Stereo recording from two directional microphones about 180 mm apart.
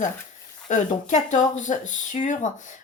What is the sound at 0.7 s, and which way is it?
Speech, 45° left (ahead or behind).